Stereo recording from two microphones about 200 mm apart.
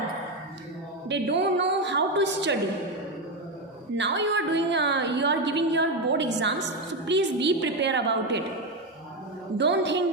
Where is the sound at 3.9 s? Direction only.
60° right (ahead or behind).